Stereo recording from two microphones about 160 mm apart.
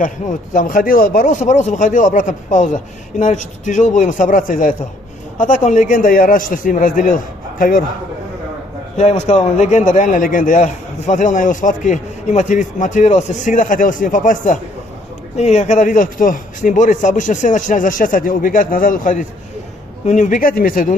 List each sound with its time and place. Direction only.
0.0 s a man's voice: 55° left (ahead or behind)
8.9 s a man's voice: 45° left (ahead or behind)